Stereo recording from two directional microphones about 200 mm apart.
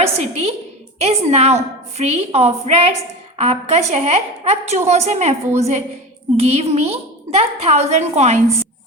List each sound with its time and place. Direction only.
0.0 s a woman's voice: 30° right (ahead or behind)